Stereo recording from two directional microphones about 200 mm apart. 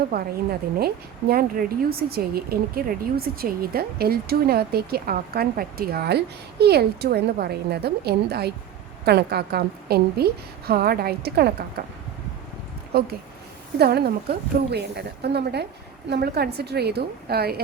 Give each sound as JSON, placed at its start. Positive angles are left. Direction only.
{"t": 0.1, "sound": "speech", "side_deg": -50}
{"t": 1.3, "sound": "speech", "side_deg": -45}
{"t": 12.9, "sound": "a woman's voice", "side_deg": -50}